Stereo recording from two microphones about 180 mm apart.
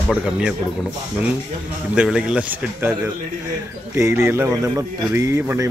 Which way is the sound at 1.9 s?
5° right (ahead or behind).